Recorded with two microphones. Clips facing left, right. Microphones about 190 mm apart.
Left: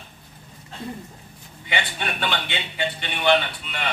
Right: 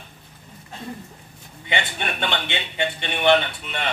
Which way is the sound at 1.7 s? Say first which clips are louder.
Right 1 dB; 25° right (ahead or behind).